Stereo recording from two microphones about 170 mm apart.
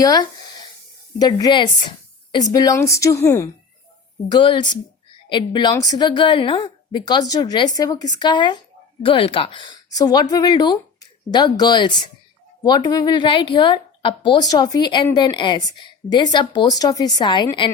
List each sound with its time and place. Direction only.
0.0 s a woman's voice: 25° left (ahead or behind)
1.4 s a woman's voice: 25° left (ahead or behind)
4.3 s a woman's voice: 30° left (ahead or behind)